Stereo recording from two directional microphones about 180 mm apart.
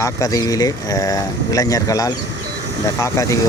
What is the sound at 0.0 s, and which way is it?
Speech, 20° left (ahead or behind).